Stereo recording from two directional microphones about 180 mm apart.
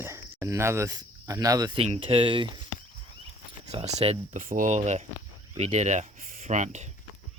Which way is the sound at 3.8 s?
35° right (ahead or behind).